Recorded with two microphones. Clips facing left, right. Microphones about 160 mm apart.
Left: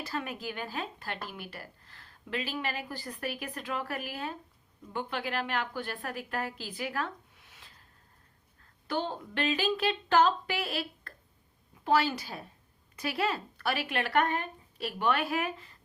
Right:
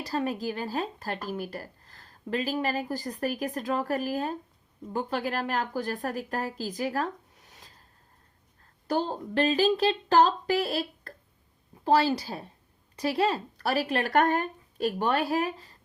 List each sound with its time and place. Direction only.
0.0 s speech: 35° right (ahead or behind)
8.9 s speech: 40° right (ahead or behind)